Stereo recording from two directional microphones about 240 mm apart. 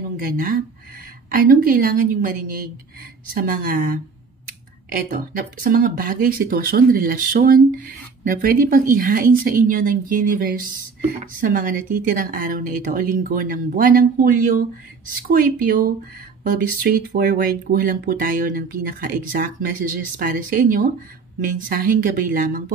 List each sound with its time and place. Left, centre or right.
0.3 s speech: right